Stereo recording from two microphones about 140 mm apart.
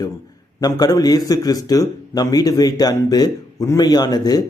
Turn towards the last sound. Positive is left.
turn(degrees=30)  # may be behind; listen again after turning